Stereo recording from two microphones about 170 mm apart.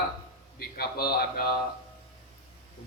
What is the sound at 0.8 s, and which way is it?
Speech, 65° left (ahead or behind).